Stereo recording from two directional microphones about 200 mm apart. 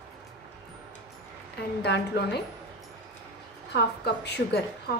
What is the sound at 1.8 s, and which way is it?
Speech, 55° left (ahead or behind).